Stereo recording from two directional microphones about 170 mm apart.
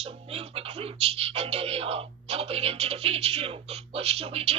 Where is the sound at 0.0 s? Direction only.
35° right (ahead or behind).